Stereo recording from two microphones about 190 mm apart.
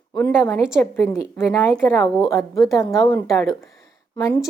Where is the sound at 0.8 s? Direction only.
10° left (ahead or behind).